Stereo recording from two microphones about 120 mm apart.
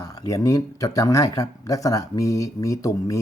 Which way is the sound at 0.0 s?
30° left (ahead or behind).